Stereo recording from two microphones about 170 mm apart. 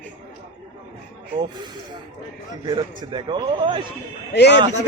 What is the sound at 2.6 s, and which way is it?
A man's voice, 25° right (ahead or behind).